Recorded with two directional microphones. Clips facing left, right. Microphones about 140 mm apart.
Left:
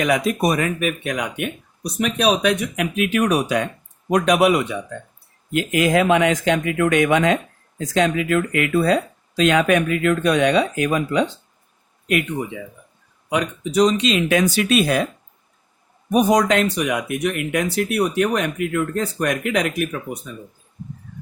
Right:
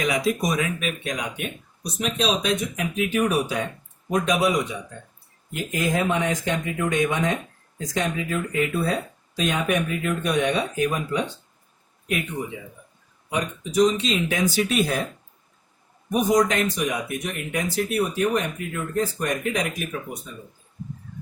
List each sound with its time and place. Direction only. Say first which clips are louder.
0.0 s speech: left 4 dB; 60° left (ahead or behind)
5.5 s speech: left 7 dB; 75° left (ahead or behind)
13.3 s speech: left 3 dB; 70° left (ahead or behind)
16.1 s speech: left 4 dB; 75° left (ahead or behind)